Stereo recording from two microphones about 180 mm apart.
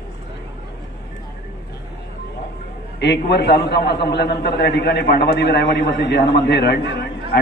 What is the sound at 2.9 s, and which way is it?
A man's voice, 70° left (ahead or behind).